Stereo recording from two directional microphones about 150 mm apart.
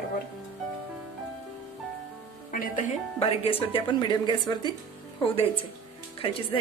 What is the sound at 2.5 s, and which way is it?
Speech, 70° left (ahead or behind).